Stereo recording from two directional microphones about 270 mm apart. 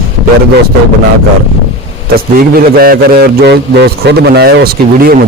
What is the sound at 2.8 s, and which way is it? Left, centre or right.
A man's voice, right.